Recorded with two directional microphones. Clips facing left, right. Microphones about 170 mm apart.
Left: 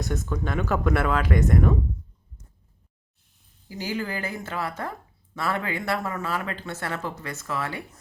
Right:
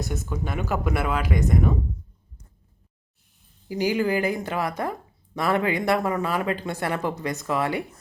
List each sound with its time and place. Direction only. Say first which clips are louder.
0.0 s speech: left 1 dB; 5° right (ahead or behind)
3.7 s speech: right 7 dB; 15° right (ahead or behind)